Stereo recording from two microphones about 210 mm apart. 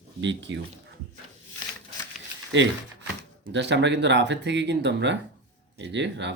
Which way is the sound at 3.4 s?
55° right (ahead or behind).